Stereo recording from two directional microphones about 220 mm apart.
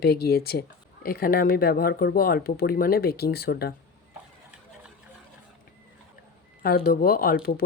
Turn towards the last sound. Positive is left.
turn(degrees=40)  # may be behind; listen again after turning